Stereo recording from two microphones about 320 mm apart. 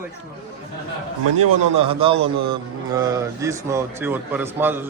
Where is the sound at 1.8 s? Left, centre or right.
Centre.